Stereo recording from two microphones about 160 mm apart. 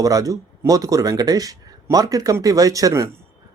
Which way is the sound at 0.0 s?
20° right (ahead or behind).